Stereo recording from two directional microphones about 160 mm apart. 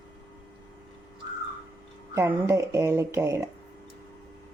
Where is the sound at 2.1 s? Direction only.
15° right (ahead or behind).